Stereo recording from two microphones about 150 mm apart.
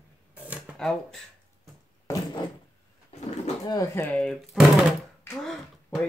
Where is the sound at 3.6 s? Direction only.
25° left (ahead or behind); by 5.9 s 5° left (ahead or behind).